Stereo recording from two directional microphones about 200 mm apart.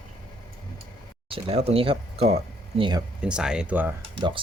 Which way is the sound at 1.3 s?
30° right (ahead or behind).